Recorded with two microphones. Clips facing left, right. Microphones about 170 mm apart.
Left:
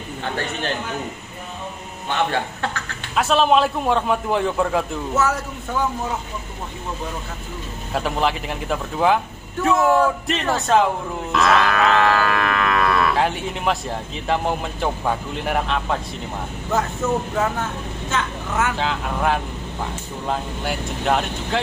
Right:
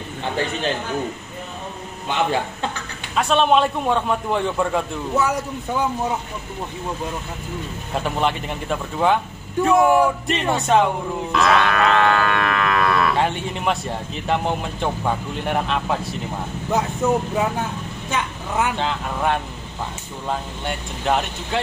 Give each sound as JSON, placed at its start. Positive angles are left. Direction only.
{"t": 3.2, "sound": "livestock", "side_deg": 0}
{"t": 5.1, "sound": "speech", "side_deg": -15}
{"t": 7.9, "sound": "livestock", "side_deg": 0}
{"t": 9.8, "sound": "speech", "side_deg": -15}
{"t": 10.0, "sound": "livestock", "side_deg": 0}
{"t": 16.7, "sound": "speech", "side_deg": -15}
{"t": 18.8, "sound": "livestock", "side_deg": 0}